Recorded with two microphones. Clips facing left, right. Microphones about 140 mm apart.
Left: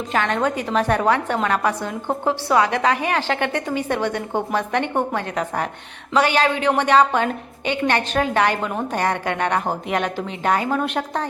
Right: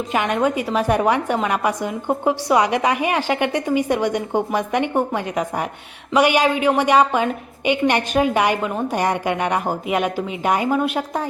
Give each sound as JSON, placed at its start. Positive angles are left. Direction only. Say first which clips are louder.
{"t": 0.1, "sound": "a woman's voice", "louder": "right 1 dB", "side_deg": -10}